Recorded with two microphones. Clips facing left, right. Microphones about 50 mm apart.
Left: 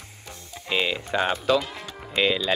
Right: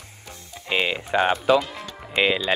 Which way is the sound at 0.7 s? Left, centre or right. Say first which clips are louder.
Right 2 dB; centre.